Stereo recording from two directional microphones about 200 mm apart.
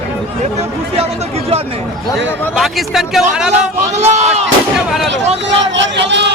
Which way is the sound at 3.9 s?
35° right (ahead or behind).